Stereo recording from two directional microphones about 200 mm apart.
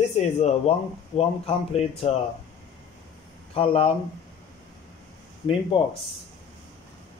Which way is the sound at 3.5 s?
30° left (ahead or behind).